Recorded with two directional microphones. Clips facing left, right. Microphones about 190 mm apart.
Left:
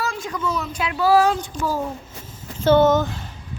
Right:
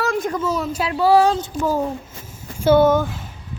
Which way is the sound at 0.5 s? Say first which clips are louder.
Right 4 dB; 40° right (ahead or behind).